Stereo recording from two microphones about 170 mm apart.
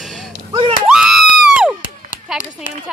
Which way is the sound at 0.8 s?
5° right (ahead or behind).